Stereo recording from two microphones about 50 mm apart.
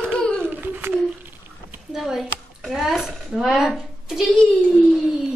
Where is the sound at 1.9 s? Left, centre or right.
Centre.